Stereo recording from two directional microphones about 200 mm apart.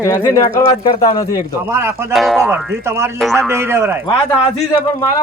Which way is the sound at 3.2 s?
Centre (ahead or behind).